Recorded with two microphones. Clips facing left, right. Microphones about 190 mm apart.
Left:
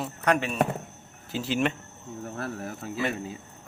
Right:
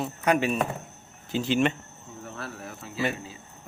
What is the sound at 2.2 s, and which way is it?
Speech, 45° left (ahead or behind).